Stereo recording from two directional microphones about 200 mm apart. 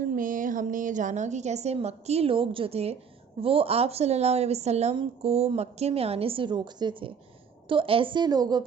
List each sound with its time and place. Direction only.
0.0 s a woman's voice: 40° right (ahead or behind); by 8.6 s 20° right (ahead or behind)